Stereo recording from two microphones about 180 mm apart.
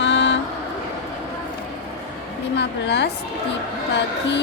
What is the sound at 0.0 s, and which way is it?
Vehicle, 90° left.